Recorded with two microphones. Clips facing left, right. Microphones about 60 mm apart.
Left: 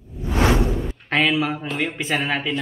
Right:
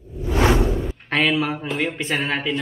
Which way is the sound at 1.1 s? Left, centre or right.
Centre.